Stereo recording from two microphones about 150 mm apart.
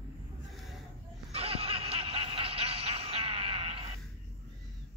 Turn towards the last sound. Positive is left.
turn(degrees=-40)  # may be behind; listen again after turning